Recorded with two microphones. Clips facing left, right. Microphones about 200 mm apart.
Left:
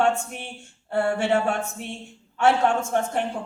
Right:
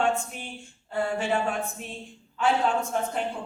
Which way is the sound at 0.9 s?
70° left (ahead or behind).